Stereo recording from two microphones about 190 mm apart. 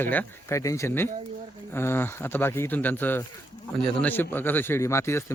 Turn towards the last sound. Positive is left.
turn(degrees=15)  # may be behind; listen again after turning